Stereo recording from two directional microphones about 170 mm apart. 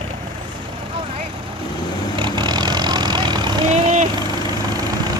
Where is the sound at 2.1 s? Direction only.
25° right (ahead or behind).